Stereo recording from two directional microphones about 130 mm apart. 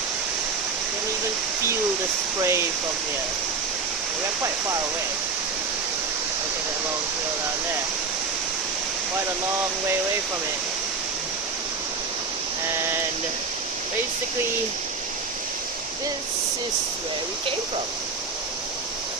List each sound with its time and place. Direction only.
2.4 s speech: 20° right (ahead or behind)